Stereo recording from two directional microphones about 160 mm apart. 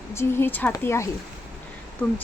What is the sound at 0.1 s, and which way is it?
A woman's voice, 15° left (ahead or behind).